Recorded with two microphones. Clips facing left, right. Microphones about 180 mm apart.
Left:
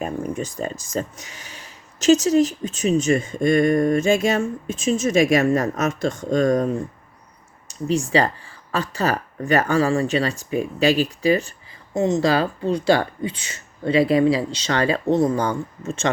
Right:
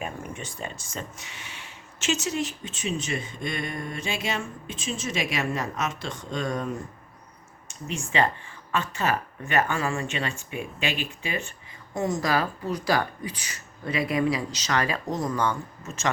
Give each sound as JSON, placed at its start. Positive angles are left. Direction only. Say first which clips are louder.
{"t": 0.0, "sound": "speech", "louder": "left 9 dB", "side_deg": 40}
{"t": 11.9, "sound": "speech", "louder": "left 7 dB", "side_deg": 25}